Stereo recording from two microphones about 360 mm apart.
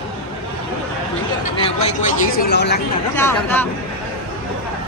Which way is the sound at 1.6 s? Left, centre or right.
Centre.